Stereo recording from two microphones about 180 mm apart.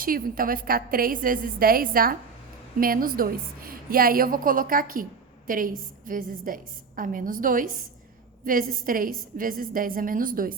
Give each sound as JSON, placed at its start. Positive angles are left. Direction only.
{"t": 0.0, "sound": "a woman's voice", "side_deg": -50}